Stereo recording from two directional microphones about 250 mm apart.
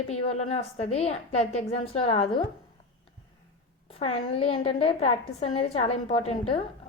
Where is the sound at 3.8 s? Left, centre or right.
Left.